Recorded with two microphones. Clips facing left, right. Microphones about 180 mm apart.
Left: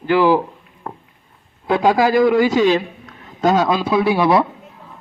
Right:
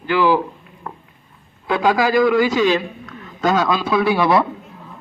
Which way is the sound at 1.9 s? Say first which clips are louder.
Left 1 dB; 25° left (ahead or behind).